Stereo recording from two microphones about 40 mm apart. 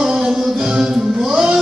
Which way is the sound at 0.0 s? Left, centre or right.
Centre.